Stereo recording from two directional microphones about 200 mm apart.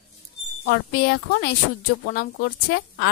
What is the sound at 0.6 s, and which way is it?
A woman's voice, 55° left (ahead or behind).